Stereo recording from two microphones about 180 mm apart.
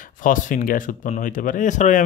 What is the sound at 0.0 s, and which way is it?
Speech, 50° left (ahead or behind).